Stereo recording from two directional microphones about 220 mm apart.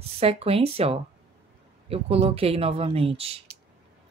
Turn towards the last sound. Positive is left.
turn(degrees=-25)  # may be behind; listen again after turning